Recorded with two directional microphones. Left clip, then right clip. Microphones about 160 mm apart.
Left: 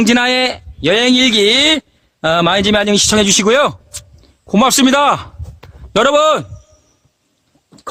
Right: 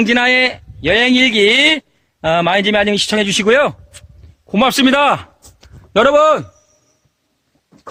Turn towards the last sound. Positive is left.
turn(degrees=10)  # may be behind; listen again after turning